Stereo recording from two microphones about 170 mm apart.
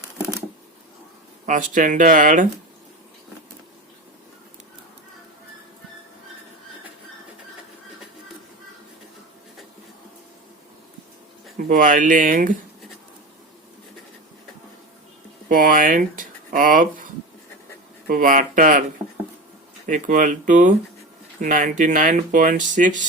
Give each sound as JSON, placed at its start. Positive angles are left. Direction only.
{"t": 1.5, "sound": "speech", "side_deg": -50}
{"t": 11.5, "sound": "speech", "side_deg": -55}
{"t": 15.4, "sound": "speech", "side_deg": -55}
{"t": 18.1, "sound": "speech", "side_deg": -55}
{"t": 19.9, "sound": "speech", "side_deg": -50}